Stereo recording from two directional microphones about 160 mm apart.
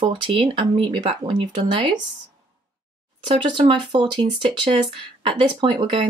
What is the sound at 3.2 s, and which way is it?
Speech, 30° right (ahead or behind).